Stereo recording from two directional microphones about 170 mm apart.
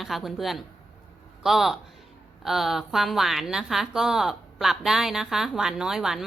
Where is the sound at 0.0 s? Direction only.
Centre (ahead or behind).